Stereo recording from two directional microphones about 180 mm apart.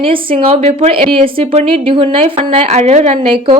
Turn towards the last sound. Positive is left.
turn(degrees=-35)  # may be behind; listen again after turning